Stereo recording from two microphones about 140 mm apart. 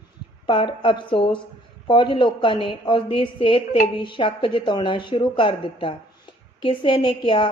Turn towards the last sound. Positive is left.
turn(degrees=35)  # may be behind; listen again after turning